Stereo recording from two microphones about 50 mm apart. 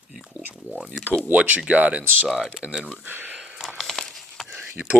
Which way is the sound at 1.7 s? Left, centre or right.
Right.